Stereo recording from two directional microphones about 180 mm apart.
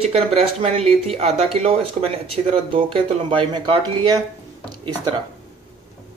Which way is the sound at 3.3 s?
25° right (ahead or behind).